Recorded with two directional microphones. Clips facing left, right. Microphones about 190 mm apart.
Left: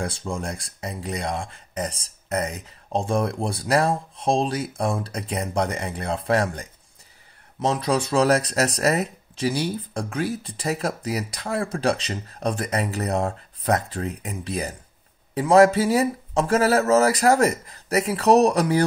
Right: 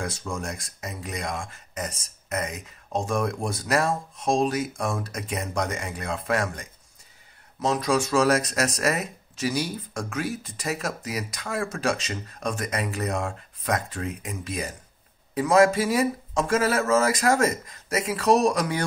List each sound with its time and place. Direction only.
0.0 s speech: 30° left (ahead or behind)